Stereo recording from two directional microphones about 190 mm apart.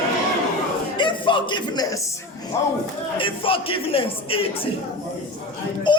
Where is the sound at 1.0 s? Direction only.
25° left (ahead or behind).